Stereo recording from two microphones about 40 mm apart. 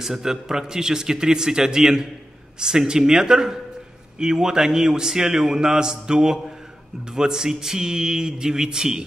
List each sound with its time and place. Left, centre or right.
0.0 s a man's voice: centre